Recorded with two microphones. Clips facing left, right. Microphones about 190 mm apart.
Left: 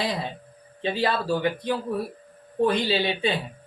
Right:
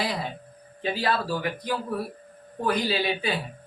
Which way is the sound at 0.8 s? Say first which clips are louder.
Left 1 dB; 25° left (ahead or behind).